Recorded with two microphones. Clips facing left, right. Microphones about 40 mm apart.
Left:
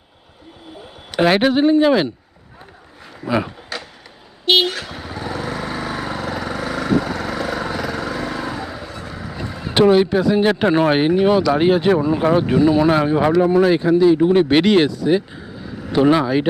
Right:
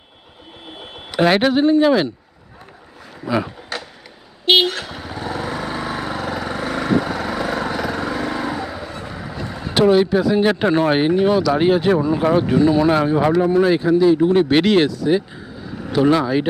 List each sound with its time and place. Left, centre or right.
1.1 s speech: centre
3.2 s speech: centre
4.4 s speech: centre
4.7 s vehicle: centre
8.9 s vehicle: centre
9.3 s a sound: centre
9.7 s speech: centre
15.9 s speech: centre